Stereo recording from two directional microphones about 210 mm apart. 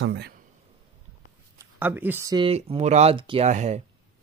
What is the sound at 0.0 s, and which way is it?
Speech, 50° right (ahead or behind).